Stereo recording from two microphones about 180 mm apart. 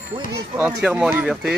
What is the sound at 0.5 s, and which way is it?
Speech, 5° right (ahead or behind).